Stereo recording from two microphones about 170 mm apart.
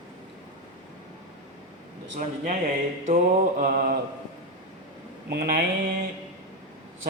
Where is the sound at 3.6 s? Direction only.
55° right (ahead or behind).